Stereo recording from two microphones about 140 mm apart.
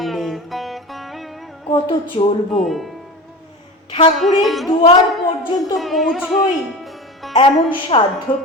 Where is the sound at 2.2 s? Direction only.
40° left (ahead or behind).